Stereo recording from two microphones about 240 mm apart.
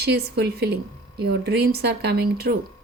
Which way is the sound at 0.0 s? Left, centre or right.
Right.